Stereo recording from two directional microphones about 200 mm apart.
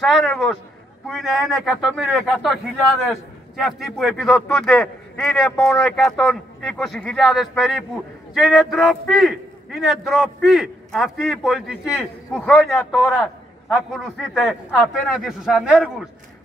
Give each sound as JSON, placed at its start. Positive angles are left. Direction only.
{"t": 0.0, "sound": "a man's voice", "side_deg": 0}